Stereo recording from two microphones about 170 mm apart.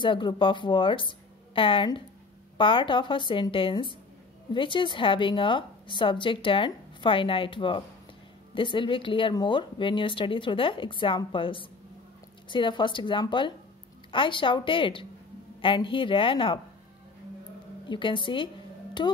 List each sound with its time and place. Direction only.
0.0 s a woman's voice: 30° left (ahead or behind)
17.8 s a woman's voice: 30° left (ahead or behind)